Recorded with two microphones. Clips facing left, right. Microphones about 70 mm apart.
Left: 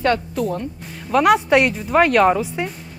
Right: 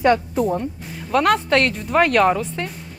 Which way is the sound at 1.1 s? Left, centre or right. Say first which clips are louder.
Left 3 dB; centre.